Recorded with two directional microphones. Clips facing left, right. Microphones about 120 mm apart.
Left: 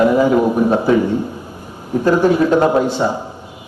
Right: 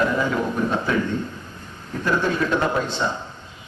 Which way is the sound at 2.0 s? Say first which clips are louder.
Left 9 dB; 40° left (ahead or behind).